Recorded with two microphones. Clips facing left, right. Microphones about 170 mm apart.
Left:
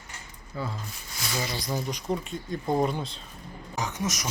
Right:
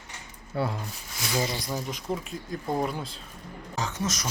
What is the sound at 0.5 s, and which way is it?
Speech, 70° right (ahead or behind).